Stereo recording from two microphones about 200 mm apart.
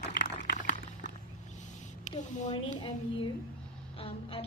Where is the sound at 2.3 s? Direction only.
35° left (ahead or behind).